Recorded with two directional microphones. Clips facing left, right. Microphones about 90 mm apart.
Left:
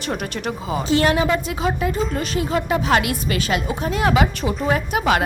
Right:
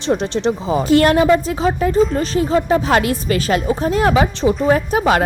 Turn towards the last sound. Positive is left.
turn(degrees=-40)  # may be behind; listen again after turning